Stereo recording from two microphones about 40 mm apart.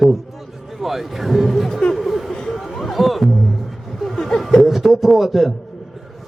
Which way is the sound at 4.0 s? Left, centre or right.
Centre.